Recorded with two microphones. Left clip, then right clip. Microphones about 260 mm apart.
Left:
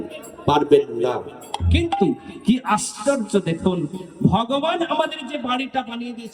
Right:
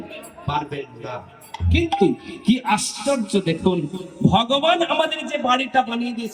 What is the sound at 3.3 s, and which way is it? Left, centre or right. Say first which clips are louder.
A man's voice: right 1 dB; centre.